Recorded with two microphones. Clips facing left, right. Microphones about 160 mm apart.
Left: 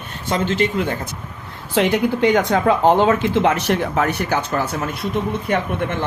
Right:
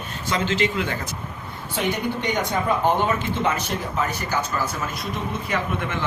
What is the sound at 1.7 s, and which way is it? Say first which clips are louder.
Speech: left 8 dB; 90° left.